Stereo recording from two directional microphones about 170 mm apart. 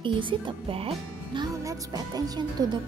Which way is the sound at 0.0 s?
30° right (ahead or behind).